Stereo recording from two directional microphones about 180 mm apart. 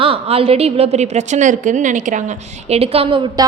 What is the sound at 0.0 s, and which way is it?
A woman's voice, 30° right (ahead or behind).